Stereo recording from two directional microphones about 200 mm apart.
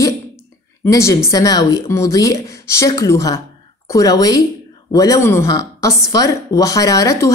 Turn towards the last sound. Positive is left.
turn(degrees=15)  # may be behind; listen again after turning